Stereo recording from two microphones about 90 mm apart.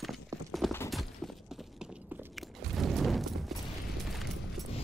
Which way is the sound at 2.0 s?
20° right (ahead or behind).